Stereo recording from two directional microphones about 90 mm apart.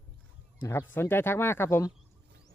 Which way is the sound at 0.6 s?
25° left (ahead or behind).